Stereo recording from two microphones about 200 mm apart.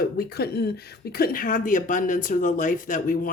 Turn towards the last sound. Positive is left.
turn(degrees=45)  # may be behind; listen again after turning